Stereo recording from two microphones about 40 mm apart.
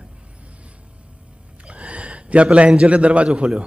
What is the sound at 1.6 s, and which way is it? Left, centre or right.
A man's voice, right.